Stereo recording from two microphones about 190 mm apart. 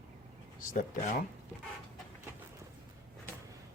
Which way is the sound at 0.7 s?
45° left (ahead or behind).